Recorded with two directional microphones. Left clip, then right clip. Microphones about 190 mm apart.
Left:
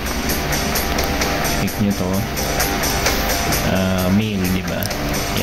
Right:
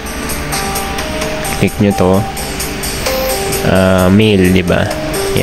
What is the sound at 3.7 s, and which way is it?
Speech, 30° right (ahead or behind).